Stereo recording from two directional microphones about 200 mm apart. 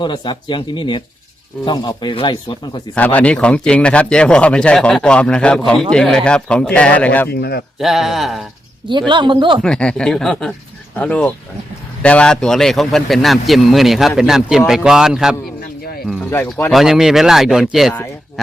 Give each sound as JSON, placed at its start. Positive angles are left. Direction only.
{"t": 0.0, "sound": "speech", "side_deg": 25}
{"t": 2.9, "sound": "speech", "side_deg": 5}
{"t": 7.3, "sound": "speech", "side_deg": 55}
{"t": 7.8, "sound": "speech", "side_deg": 0}
{"t": 8.9, "sound": "a man's voice", "side_deg": -25}
{"t": 9.6, "sound": "speech", "side_deg": 5}
{"t": 16.0, "sound": "speech", "side_deg": 10}
{"t": 16.7, "sound": "speech", "side_deg": 0}